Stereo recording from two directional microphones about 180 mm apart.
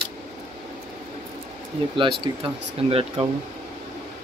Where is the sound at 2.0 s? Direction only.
30° right (ahead or behind).